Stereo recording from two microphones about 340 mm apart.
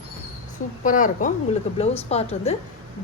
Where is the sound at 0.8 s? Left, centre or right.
Left.